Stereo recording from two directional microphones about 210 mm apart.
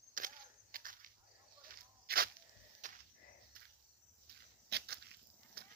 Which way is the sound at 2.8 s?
35° right (ahead or behind).